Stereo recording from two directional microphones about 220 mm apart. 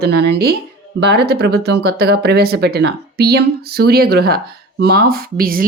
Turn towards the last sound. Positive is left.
turn(degrees=-40)  # may be behind; listen again after turning